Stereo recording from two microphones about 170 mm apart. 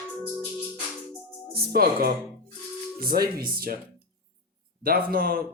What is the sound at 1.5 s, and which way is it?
A man's voice, 65° right (ahead or behind).